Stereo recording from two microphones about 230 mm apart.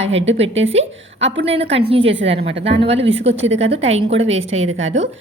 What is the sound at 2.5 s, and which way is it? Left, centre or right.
Speech, right.